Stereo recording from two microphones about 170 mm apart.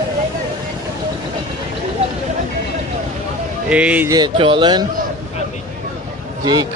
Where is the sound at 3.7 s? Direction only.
10° right (ahead or behind).